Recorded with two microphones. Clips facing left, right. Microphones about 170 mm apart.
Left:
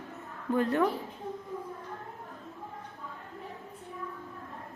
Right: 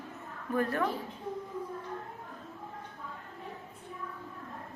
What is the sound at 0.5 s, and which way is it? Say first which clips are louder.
Speech: left 3 dB; 20° left (ahead or behind).